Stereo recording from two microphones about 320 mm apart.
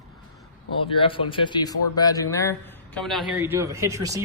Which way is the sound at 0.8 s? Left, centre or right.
Centre.